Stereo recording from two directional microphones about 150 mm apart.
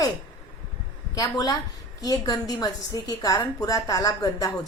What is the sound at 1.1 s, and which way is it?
A woman's voice, 25° left (ahead or behind).